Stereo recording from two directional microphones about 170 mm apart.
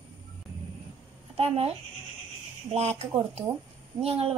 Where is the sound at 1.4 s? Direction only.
35° right (ahead or behind).